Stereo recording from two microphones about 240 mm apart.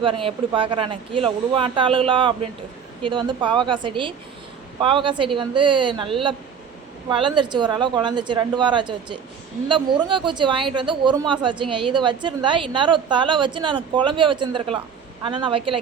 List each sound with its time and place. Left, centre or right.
0.0 s speech: right